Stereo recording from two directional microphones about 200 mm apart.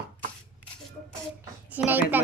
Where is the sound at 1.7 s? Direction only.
10° right (ahead or behind).